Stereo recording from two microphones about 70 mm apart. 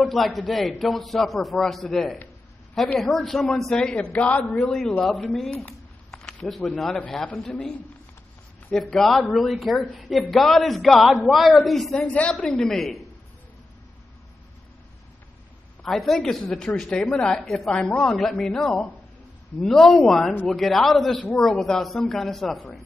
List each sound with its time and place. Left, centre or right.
0.1 s speech: centre
3.8 s a man's voice: centre
4.6 s a woman's voice: centre
6.1 s a sound: centre
7.4 s a woman's voice: centre
8.9 s speech: centre
12.1 s a man's voice: centre
12.4 s speech: centre
15.8 s a woman's voice: centre